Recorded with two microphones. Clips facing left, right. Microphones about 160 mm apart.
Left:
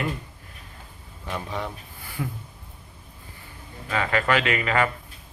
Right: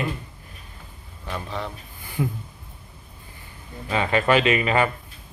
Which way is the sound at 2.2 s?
20° right (ahead or behind).